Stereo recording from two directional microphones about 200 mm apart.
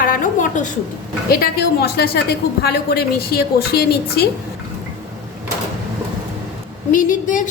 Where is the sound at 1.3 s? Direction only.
50° left (ahead or behind).